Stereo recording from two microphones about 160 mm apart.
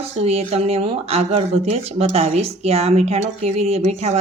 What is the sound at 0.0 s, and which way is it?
Speech, 40° right (ahead or behind).